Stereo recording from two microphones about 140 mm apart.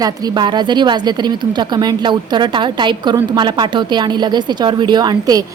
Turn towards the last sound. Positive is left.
turn(degrees=-25)  # may be behind; listen again after turning